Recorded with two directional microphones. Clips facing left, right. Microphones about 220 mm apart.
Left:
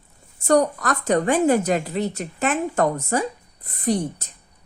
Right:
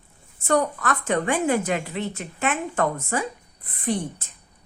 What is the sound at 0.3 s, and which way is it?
A woman's voice, 40° left (ahead or behind).